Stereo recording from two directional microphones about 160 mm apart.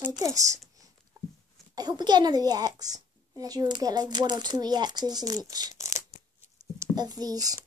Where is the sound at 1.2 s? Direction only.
20° right (ahead or behind).